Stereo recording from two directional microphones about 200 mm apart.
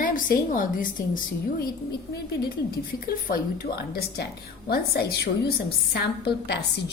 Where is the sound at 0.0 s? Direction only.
45° left (ahead or behind).